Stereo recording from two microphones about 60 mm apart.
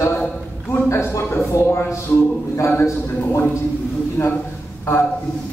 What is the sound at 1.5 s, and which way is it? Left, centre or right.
Speech, left.